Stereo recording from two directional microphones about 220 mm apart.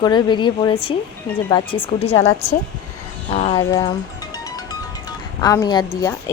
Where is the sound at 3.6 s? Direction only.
15° left (ahead or behind).